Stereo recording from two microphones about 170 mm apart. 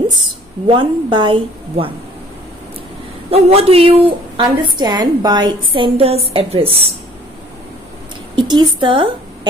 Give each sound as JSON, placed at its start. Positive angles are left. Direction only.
{"t": 0.7, "sound": "a woman's voice", "side_deg": -30}
{"t": 3.3, "sound": "a woman's voice", "side_deg": -35}
{"t": 8.4, "sound": "a woman's voice", "side_deg": -25}